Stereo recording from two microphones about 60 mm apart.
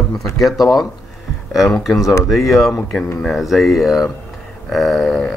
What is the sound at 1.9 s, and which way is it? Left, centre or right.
Speech, left.